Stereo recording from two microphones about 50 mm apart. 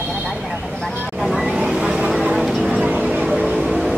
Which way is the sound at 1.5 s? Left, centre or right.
Centre.